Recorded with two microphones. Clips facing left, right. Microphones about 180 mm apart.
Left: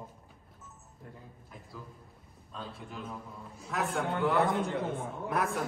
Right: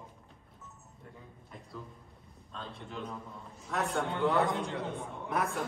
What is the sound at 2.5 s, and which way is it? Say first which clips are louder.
A man's voice: left 1 dB; 5° left (ahead or behind).